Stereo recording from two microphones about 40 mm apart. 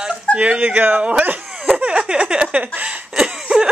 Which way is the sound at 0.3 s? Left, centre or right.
Right.